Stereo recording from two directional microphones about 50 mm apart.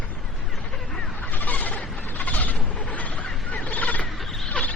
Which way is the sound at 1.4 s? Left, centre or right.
Left.